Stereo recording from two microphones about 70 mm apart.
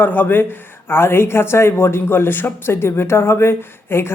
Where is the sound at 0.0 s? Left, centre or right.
Left.